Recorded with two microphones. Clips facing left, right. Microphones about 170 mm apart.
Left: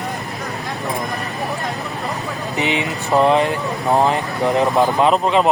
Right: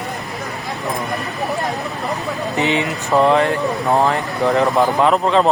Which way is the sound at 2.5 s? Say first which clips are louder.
Right 2 dB; 20° left (ahead or behind).